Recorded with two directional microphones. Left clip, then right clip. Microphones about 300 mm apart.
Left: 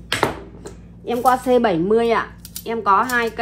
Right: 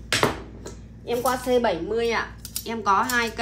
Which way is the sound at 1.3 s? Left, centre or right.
Centre.